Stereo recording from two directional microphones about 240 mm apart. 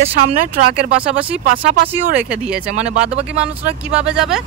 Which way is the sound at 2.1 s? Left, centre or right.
Centre.